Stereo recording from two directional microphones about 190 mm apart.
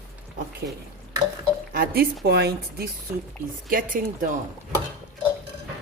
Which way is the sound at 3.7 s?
45° right (ahead or behind).